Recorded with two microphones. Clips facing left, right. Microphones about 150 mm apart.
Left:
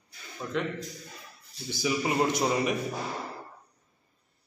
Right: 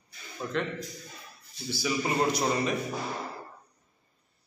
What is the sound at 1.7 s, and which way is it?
A man's voice, 15° left (ahead or behind).